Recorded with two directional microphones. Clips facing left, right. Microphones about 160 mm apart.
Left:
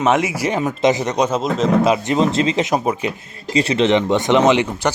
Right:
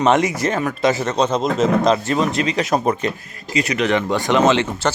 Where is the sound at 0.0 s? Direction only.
5° left (ahead or behind).